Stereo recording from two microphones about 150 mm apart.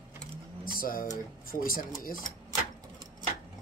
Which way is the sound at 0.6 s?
70° left (ahead or behind).